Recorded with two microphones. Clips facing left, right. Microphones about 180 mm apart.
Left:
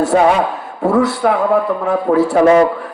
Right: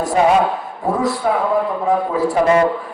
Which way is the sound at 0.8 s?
70° left (ahead or behind).